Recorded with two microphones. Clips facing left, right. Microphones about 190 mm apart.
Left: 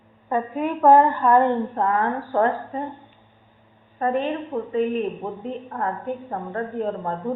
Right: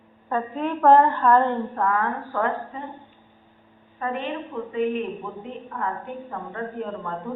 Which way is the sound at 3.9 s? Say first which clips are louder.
Left 5 dB; 35° left (ahead or behind).